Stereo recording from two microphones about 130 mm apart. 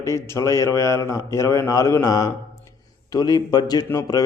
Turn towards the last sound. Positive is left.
turn(degrees=30)  # may be behind; listen again after turning